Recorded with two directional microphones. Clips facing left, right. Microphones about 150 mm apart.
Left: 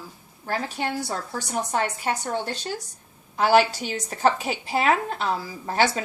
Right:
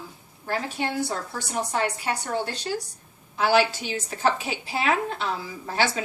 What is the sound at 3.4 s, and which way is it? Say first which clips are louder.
A woman's voice: left 2 dB; 45° left (ahead or behind).